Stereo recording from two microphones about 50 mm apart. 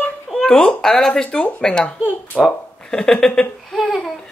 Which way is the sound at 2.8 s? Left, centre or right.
Centre.